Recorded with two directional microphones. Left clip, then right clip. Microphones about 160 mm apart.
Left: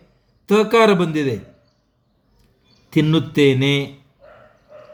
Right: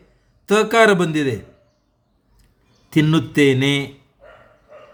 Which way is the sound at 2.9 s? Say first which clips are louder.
Even; 20° right (ahead or behind).